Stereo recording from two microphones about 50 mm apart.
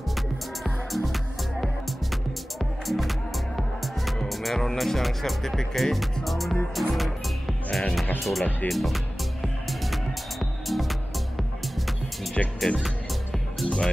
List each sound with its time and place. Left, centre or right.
0.7 s music: centre
4.3 s speech: centre
6.2 s music: centre
8.2 s speech: centre
8.6 s music: centre
12.4 s speech: centre
12.8 s music: centre